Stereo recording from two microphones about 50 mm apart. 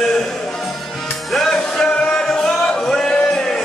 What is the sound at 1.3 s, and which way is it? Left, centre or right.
Music, centre.